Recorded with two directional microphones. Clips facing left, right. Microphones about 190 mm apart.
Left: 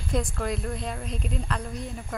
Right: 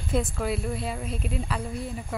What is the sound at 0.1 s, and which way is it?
Speech, 5° right (ahead or behind).